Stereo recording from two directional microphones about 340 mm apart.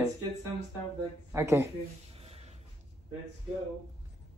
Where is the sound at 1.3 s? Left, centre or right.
Centre.